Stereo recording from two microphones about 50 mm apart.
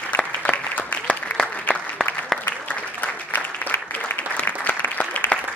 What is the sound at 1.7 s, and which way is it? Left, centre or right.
Applause, centre.